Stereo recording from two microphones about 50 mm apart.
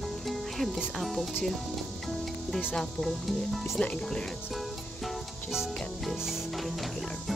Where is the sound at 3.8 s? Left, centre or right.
Left.